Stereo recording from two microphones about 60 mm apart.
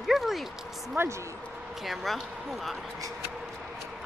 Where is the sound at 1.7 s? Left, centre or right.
Centre.